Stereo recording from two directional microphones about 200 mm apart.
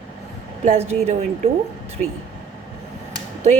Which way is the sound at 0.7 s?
35° right (ahead or behind).